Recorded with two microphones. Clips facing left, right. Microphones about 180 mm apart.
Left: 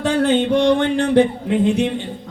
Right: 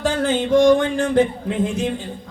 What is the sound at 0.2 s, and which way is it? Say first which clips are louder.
Music: even; 65° left (ahead or behind).